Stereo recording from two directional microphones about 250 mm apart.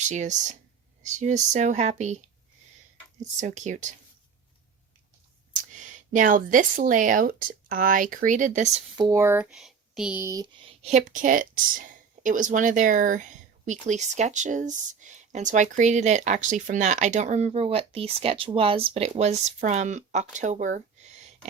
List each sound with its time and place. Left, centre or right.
0.1 s speech: right
3.3 s speech: right
5.5 s speech: right
9.0 s speech: centre
10.8 s speech: right